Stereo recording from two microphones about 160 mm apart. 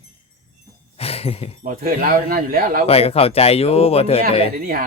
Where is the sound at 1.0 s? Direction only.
40° left (ahead or behind).